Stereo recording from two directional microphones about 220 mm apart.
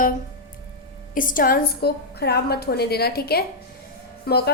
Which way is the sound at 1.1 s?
40° left (ahead or behind).